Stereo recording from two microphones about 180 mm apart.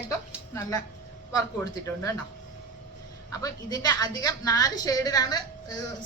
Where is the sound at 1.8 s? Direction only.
20° left (ahead or behind).